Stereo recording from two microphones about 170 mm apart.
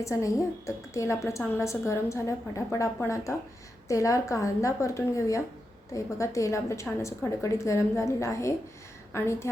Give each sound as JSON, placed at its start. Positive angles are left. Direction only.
{"t": 0.0, "sound": "a woman's voice", "side_deg": 20}